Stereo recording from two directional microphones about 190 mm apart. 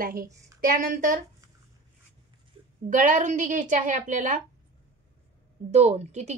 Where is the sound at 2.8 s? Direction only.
40° right (ahead or behind).